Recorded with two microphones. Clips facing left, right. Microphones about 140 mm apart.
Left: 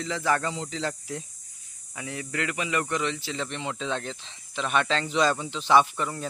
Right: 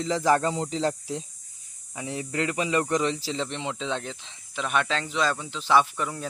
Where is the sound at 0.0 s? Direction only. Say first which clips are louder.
Right 4 dB; 35° right (ahead or behind).